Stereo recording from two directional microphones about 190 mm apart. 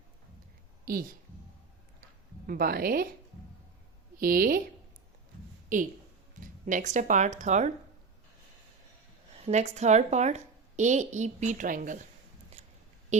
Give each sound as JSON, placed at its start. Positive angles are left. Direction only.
{"t": 2.5, "sound": "a woman's voice", "side_deg": -50}
{"t": 4.2, "sound": "a woman's voice", "side_deg": -50}
{"t": 5.7, "sound": "a woman's voice", "side_deg": -45}
{"t": 9.3, "sound": "a woman's voice", "side_deg": -35}